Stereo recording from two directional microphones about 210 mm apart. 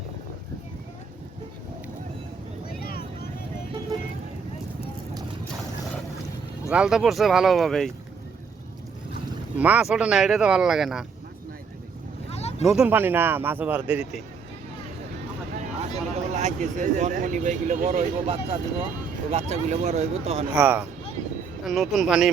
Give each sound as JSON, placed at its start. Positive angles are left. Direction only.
{"t": 2.8, "sound": "vehicle", "side_deg": 45}
{"t": 6.7, "sound": "speech", "side_deg": -5}
{"t": 9.6, "sound": "speech", "side_deg": -5}
{"t": 12.3, "sound": "vehicle", "side_deg": 30}
{"t": 12.6, "sound": "speech", "side_deg": -5}
{"t": 16.0, "sound": "speech", "side_deg": -35}
{"t": 20.5, "sound": "speech", "side_deg": -10}